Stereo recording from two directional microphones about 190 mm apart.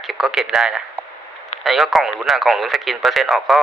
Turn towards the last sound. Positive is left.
turn(degrees=0)  # may be behind; listen again after turning